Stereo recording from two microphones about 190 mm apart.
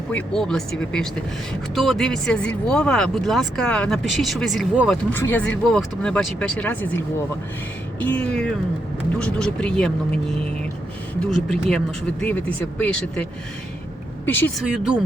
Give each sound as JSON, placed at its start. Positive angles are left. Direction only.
{"t": 0.1, "sound": "speech", "side_deg": 5}
{"t": 14.3, "sound": "speech", "side_deg": 10}